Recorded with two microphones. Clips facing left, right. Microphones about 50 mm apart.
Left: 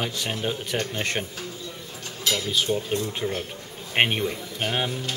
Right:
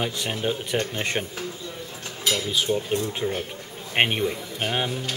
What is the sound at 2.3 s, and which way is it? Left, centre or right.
Speech, centre.